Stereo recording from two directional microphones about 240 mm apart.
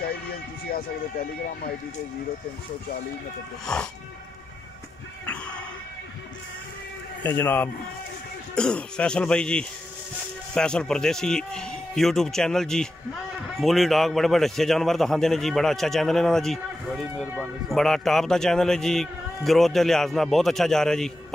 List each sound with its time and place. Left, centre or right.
0.0 s vehicle: left
3.6 s a man's voice: centre
7.2 s a man's voice: centre